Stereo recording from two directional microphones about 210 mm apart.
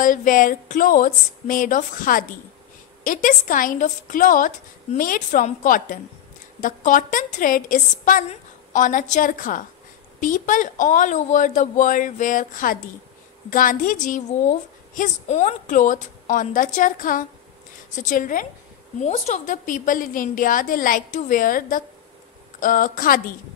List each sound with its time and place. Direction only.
0.0 s a woman's voice: 40° left (ahead or behind)